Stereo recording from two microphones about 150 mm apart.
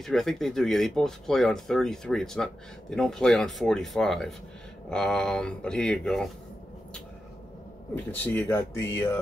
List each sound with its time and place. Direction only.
0.0 s speech: centre (ahead or behind)
7.9 s speech: 15° left (ahead or behind)